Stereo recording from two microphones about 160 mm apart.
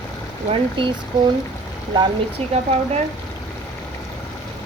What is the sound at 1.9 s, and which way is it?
Speech, 35° right (ahead or behind).